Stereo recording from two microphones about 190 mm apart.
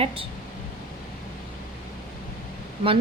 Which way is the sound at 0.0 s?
30° right (ahead or behind).